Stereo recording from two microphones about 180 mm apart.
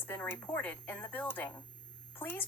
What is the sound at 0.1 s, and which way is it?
A woman's voice, 10° left (ahead or behind).